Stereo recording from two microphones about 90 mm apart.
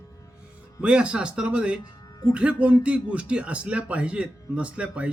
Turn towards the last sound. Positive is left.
turn(degrees=-10)  # may be behind; listen again after turning